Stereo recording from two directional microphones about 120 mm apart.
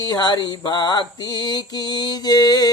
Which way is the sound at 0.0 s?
35° left (ahead or behind).